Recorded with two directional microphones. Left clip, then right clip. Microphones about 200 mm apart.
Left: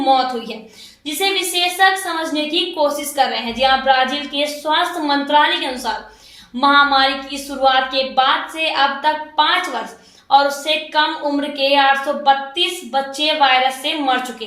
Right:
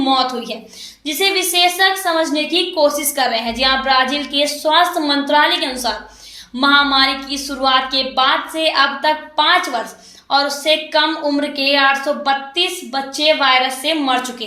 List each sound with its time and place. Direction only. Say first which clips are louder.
0.0 s a woman's voice: left 1 dB; 40° right (ahead or behind)
6.6 s a woman's voice: even; 40° right (ahead or behind)